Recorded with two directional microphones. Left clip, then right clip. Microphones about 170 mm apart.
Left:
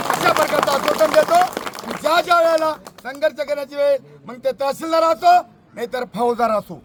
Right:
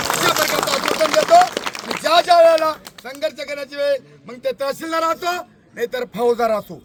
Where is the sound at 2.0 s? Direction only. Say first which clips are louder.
Right 3 dB; 5° left (ahead or behind).